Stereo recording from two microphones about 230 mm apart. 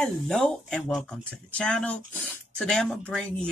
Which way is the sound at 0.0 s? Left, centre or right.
Centre.